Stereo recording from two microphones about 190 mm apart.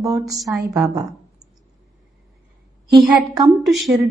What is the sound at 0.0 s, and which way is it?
Speech, 20° right (ahead or behind).